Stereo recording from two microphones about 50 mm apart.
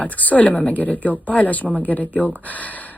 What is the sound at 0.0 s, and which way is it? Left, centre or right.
Speech, left.